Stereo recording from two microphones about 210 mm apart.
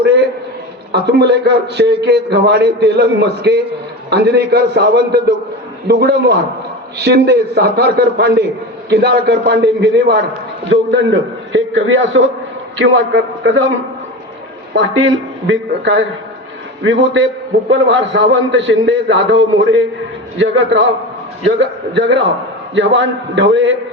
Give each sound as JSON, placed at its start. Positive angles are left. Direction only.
{"t": 0.9, "sound": "a man's voice", "side_deg": -55}
{"t": 13.4, "sound": "a man's voice", "side_deg": -65}